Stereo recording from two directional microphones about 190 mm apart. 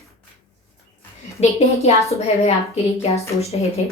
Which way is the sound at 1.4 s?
35° left (ahead or behind).